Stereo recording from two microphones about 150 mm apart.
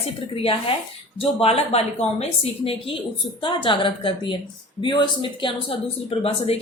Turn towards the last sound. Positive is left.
turn(degrees=40)  # may be behind; listen again after turning